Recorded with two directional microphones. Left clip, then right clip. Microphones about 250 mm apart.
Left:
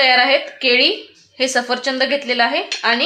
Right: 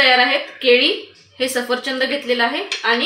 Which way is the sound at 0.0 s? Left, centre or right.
Left.